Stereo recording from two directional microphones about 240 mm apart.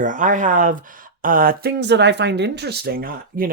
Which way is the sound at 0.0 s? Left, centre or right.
Right.